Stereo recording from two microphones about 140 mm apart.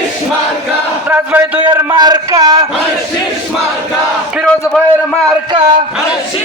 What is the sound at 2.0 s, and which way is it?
Speech, 30° right (ahead or behind).